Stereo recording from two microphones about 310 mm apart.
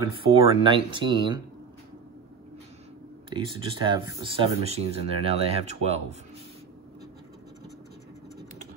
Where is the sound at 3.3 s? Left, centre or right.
Centre.